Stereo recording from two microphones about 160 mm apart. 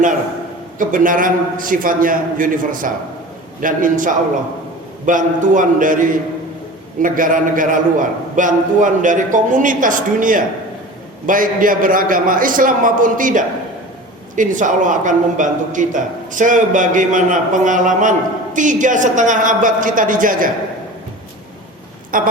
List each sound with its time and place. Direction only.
0.8 s a man's voice: 55° right (ahead or behind)
22.1 s a man's voice: 60° right (ahead or behind)